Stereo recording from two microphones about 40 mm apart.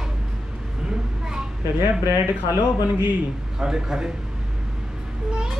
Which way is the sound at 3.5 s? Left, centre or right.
Centre.